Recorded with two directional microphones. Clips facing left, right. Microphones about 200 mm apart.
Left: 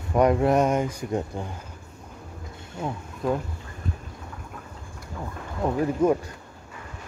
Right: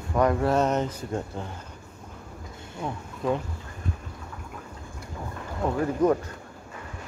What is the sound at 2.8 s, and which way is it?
Speech, 5° left (ahead or behind).